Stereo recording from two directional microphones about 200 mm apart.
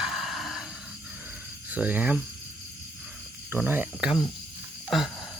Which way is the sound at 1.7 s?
10° right (ahead or behind).